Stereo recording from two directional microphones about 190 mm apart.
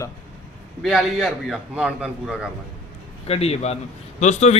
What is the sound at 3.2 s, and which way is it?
Speech, 30° left (ahead or behind).